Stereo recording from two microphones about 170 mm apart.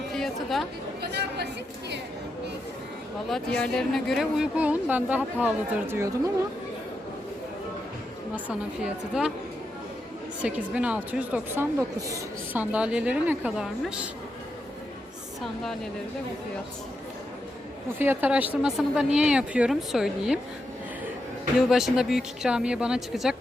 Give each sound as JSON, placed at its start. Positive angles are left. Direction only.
{"t": 0.1, "sound": "chatter", "side_deg": 0}
{"t": 1.1, "sound": "chatter", "side_deg": -80}
{"t": 3.2, "sound": "speech", "side_deg": 5}
{"t": 8.4, "sound": "speech", "side_deg": -5}
{"t": 10.4, "sound": "speech", "side_deg": -5}
{"t": 12.7, "sound": "speech", "side_deg": -5}
{"t": 15.4, "sound": "speech", "side_deg": 0}
{"t": 17.9, "sound": "speech", "side_deg": -15}
{"t": 21.7, "sound": "speech", "side_deg": 0}